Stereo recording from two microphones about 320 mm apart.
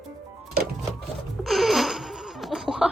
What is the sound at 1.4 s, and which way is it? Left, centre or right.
Laughter, centre.